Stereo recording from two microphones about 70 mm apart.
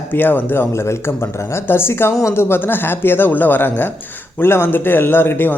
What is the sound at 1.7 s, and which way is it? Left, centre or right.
A man's voice, left.